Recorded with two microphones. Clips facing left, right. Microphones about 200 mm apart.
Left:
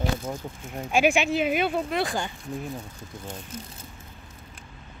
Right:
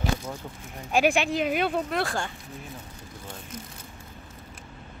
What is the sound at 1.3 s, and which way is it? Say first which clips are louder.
Speech: left 1 dB; 5° left (ahead or behind).